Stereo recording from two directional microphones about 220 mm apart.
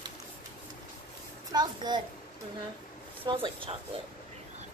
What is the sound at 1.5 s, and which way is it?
Speech, 20° right (ahead or behind).